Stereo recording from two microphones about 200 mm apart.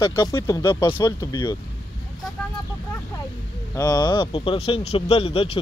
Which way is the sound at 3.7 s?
20° left (ahead or behind).